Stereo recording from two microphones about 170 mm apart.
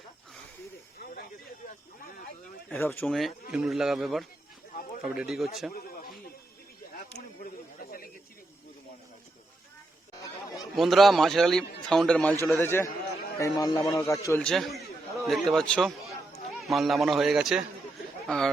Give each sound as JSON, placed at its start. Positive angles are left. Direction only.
{"t": 2.6, "sound": "speech", "side_deg": 10}
{"t": 3.1, "sound": "a man's voice", "side_deg": 0}
{"t": 5.7, "sound": "a sound", "side_deg": 55}
{"t": 7.4, "sound": "a sound", "side_deg": 55}
{"t": 10.8, "sound": "a man's voice", "side_deg": 0}
{"t": 14.4, "sound": "a man's voice", "side_deg": 0}